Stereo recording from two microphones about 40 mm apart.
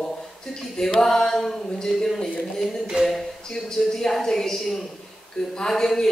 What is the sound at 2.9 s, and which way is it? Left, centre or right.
Speech, right.